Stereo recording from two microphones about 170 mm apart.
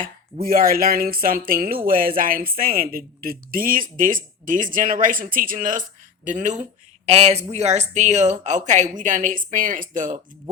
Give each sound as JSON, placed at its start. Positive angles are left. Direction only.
{"t": 0.0, "sound": "a woman's voice", "side_deg": -60}